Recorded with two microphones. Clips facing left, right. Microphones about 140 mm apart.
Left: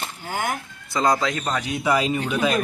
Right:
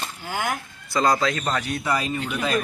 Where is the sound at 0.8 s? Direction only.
20° left (ahead or behind).